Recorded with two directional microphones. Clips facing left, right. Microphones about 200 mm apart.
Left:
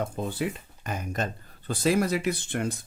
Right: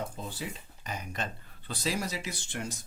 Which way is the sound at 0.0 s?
55° left (ahead or behind).